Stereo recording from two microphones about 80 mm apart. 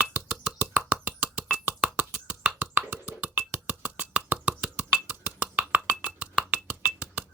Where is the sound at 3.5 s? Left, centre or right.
Centre.